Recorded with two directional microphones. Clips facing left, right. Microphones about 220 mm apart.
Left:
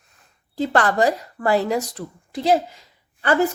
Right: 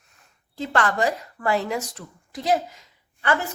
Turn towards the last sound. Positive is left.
turn(degrees=35)  # may be behind; listen again after turning